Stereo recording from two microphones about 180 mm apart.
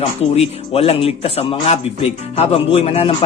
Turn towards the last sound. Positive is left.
turn(degrees=35)  # may be behind; listen again after turning